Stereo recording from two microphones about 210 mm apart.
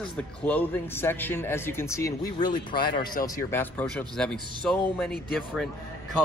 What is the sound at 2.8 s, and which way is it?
Speech, 40° left (ahead or behind).